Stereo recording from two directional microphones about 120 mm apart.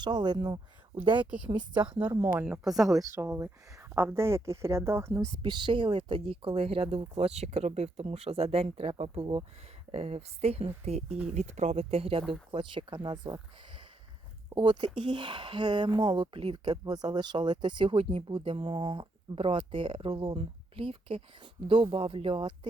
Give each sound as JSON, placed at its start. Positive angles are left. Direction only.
{"t": 0.0, "sound": "speech", "side_deg": -40}
{"t": 1.2, "sound": "speech", "side_deg": -10}
{"t": 2.0, "sound": "speech", "side_deg": -30}
{"t": 2.4, "sound": "speech", "side_deg": -5}
{"t": 3.0, "sound": "speech", "side_deg": -25}
{"t": 5.4, "sound": "speech", "side_deg": -40}
{"t": 11.3, "sound": "speech", "side_deg": -75}
{"t": 16.8, "sound": "speech", "side_deg": -35}